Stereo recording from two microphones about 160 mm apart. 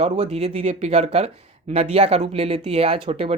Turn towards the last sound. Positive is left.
turn(degrees=-35)  # may be behind; listen again after turning